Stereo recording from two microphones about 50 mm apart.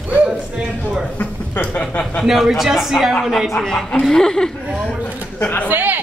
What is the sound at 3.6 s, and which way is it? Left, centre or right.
Speech, centre.